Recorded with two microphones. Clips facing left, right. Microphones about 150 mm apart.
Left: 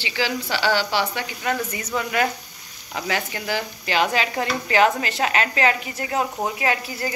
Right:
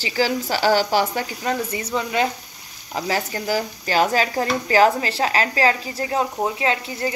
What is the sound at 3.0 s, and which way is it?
Speech, 35° right (ahead or behind).